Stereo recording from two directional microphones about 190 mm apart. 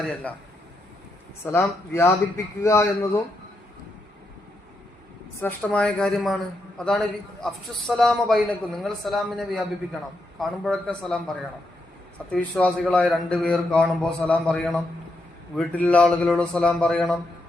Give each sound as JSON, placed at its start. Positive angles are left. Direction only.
{"t": 0.0, "sound": "a man's voice", "side_deg": 5}
{"t": 1.5, "sound": "speech", "side_deg": 15}
{"t": 5.4, "sound": "a man's voice", "side_deg": 10}
{"t": 12.3, "sound": "a man's voice", "side_deg": 5}